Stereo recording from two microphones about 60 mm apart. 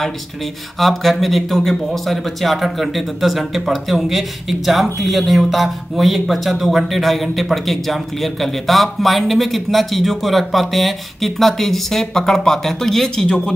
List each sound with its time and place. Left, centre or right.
0.7 s a man's voice: centre